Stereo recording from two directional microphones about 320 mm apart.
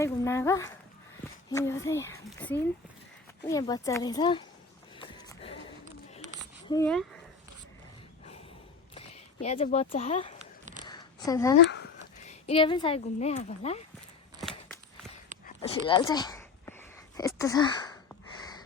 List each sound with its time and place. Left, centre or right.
0.0 s speech: centre
4.9 s music: centre
6.7 s speech: centre
9.0 s speech: centre
10.8 s a sound: centre
12.2 s speech: centre
15.4 s a sound: centre